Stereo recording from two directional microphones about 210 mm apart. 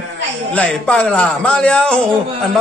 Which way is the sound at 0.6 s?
5° left (ahead or behind).